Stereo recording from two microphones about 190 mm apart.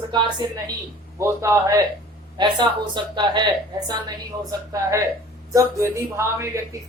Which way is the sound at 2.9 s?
25° right (ahead or behind).